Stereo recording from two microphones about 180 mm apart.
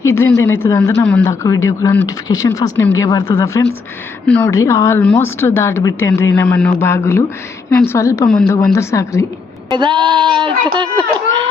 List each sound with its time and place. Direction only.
0.3 s speech: 20° left (ahead or behind)
9.6 s a child's voice: 25° right (ahead or behind)